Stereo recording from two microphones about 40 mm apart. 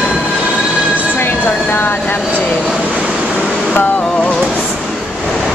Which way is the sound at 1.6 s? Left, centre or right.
Left.